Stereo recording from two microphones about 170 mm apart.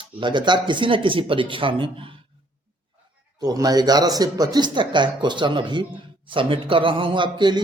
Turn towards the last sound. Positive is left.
turn(degrees=-25)  # may be behind; listen again after turning